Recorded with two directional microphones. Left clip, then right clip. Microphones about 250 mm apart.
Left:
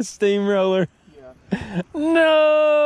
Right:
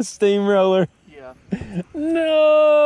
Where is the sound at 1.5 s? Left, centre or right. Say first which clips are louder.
Left 3 dB; left.